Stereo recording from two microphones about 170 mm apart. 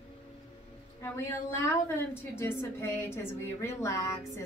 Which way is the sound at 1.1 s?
15° left (ahead or behind).